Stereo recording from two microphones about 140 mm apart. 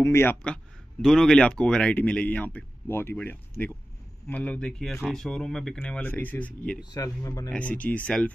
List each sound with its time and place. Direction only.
0.0 s speech: 20° left (ahead or behind)
6.9 s speech: 25° left (ahead or behind)
7.5 s speech: 10° left (ahead or behind)